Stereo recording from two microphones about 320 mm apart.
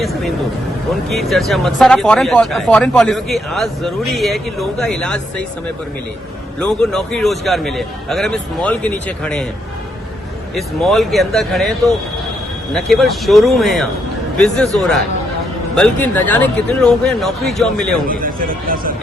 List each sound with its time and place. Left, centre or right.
0.0 s speech: centre
6.6 s speech: centre
10.5 s speech: centre
18.1 s speech: right